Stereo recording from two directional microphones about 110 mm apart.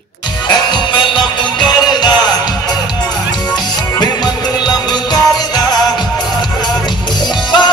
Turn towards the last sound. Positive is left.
turn(degrees=45)  # may be behind; listen again after turning